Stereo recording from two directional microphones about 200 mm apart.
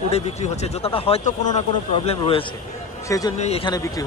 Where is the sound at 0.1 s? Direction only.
35° left (ahead or behind); by 3.3 s 15° left (ahead or behind).